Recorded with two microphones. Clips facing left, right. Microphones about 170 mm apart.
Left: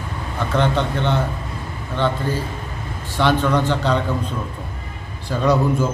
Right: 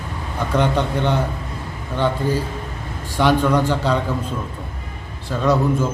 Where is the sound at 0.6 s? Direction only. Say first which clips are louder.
Right 1 dB; 10° right (ahead or behind).